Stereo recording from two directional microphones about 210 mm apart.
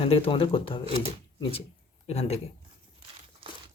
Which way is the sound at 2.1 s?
30° left (ahead or behind).